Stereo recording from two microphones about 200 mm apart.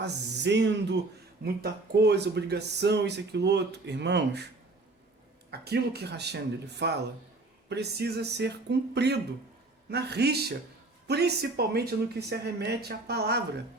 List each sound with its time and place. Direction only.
0.0 s speech: 60° right (ahead or behind)
5.5 s speech: 55° right (ahead or behind)